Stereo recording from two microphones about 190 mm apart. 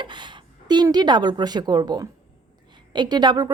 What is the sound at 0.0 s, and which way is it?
A woman's voice, 25° right (ahead or behind).